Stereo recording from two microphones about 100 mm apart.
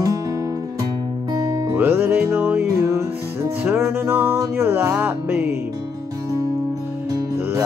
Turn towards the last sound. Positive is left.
turn(degrees=-30)  # may be behind; listen again after turning